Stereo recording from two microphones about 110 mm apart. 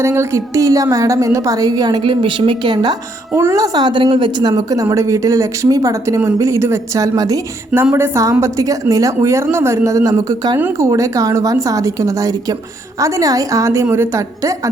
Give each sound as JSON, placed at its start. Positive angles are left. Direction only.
{"t": 0.0, "sound": "a woman's voice", "side_deg": -25}
{"t": 2.0, "sound": "speech", "side_deg": -45}
{"t": 3.3, "sound": "a woman's voice", "side_deg": -25}